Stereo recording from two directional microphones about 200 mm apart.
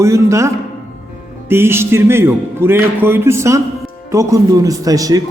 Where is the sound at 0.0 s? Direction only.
15° right (ahead or behind).